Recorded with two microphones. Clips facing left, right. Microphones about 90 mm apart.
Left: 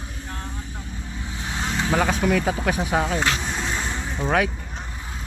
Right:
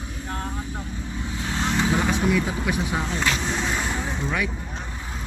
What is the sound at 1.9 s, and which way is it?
Speech, 55° left (ahead or behind).